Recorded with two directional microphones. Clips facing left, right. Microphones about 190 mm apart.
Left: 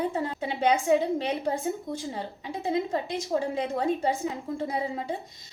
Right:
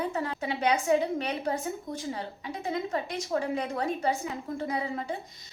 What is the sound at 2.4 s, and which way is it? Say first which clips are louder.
A woman's voice: left 5 dB; 25° left (ahead or behind).